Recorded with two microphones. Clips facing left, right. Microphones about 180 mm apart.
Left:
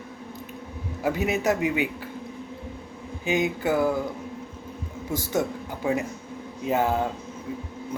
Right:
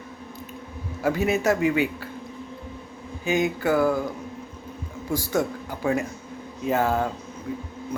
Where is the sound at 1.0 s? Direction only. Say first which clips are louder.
Right 2 dB; 15° left (ahead or behind).